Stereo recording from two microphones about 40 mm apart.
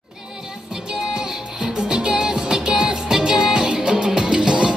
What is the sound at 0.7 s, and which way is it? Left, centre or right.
Music, centre.